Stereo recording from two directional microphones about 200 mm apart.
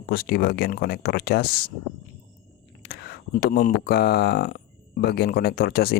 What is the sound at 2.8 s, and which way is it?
Speech, 50° left (ahead or behind).